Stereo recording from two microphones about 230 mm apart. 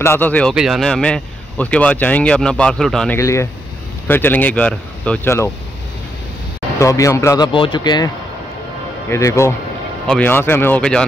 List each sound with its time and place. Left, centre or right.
0.0 s speech: centre
3.2 s speech: centre
6.8 s speech: centre
9.1 s speech: centre